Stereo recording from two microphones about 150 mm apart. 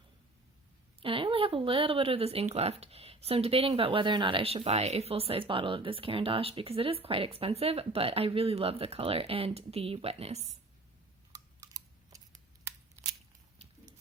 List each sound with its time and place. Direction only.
1.0 s speech: 35° right (ahead or behind)
11.6 s typing: 25° right (ahead or behind)